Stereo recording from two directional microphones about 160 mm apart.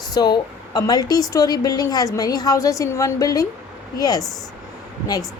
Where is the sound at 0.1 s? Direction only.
25° left (ahead or behind).